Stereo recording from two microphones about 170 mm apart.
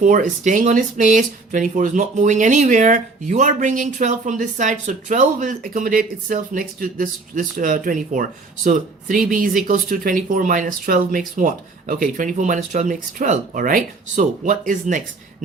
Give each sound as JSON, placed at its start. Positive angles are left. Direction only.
{"t": 0.0, "sound": "speech", "side_deg": -50}